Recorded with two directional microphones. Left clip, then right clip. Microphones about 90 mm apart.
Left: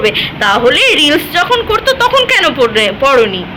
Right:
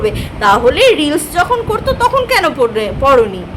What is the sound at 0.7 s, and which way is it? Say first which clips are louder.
A woman's voice: left 2 dB; 25° right (ahead or behind).